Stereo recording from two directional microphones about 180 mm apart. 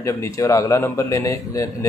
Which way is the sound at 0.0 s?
15° left (ahead or behind).